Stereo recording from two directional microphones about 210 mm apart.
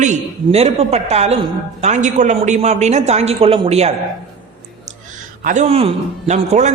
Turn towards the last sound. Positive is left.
turn(degrees=-30)  # may be behind; listen again after turning